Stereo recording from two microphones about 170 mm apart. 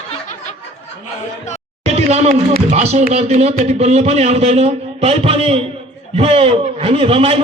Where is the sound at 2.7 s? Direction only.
40° right (ahead or behind).